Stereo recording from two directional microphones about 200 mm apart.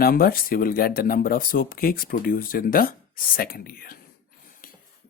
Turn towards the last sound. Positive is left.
turn(degrees=50)  # may be behind; listen again after turning